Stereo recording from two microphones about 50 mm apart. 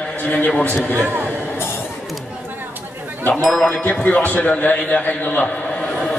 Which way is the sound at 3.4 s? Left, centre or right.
Centre.